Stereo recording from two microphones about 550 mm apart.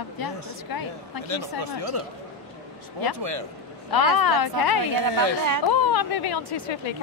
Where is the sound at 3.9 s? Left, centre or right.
Left.